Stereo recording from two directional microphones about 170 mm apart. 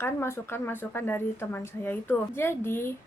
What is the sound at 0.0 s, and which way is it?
Speech, 15° left (ahead or behind).